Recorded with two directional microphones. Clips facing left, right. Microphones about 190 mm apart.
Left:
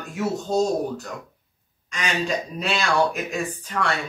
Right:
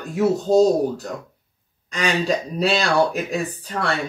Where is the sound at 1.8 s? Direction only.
35° right (ahead or behind).